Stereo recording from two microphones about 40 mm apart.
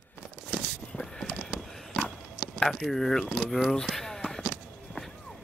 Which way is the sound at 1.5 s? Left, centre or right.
Centre.